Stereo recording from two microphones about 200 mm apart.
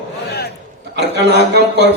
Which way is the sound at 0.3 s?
55° left (ahead or behind).